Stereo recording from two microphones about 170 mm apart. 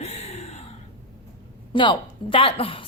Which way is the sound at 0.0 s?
35° left (ahead or behind).